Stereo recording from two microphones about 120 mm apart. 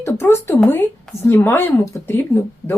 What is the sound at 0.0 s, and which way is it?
A woman's voice, 20° left (ahead or behind).